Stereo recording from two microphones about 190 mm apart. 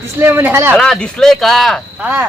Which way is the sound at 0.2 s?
10° right (ahead or behind).